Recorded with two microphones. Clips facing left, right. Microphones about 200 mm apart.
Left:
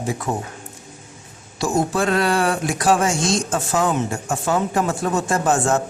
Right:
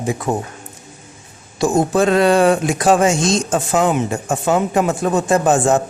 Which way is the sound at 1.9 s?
20° right (ahead or behind).